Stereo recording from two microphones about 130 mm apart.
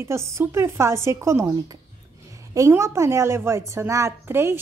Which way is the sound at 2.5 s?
25° right (ahead or behind).